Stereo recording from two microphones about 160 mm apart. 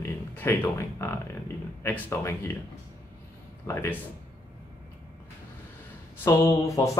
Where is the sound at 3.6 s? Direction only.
10° left (ahead or behind).